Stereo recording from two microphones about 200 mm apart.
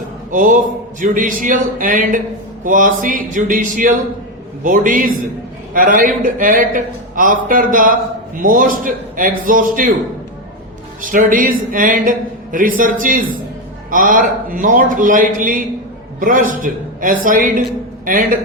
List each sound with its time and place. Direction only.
0.3 s a man's voice: 40° right (ahead or behind)
11.0 s a man's voice: 40° right (ahead or behind)